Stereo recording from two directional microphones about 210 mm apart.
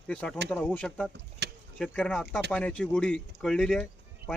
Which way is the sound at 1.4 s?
50° right (ahead or behind).